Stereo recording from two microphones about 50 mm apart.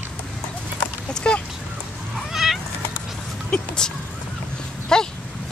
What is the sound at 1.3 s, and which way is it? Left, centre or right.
Duck, centre.